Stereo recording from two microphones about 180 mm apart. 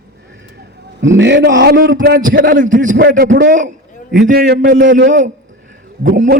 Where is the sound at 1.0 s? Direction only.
85° right.